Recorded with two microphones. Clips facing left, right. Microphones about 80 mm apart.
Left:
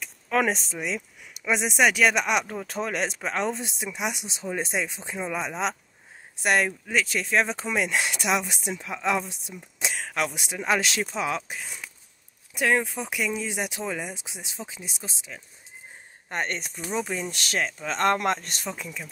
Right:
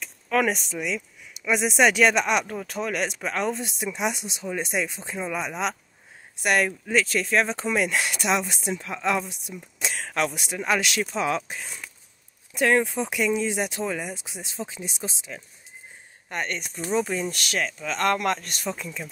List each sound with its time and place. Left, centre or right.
0.3 s speech: left
1.4 s speech: centre
1.8 s speech: centre
2.6 s speech: left; by 4.3 s centre
4.3 s speech: left
5.1 s speech: centre
6.4 s speech: left
11.1 s speech: centre
16.3 s speech: left
16.7 s speech: centre
17.3 s speech: left
18.7 s speech: centre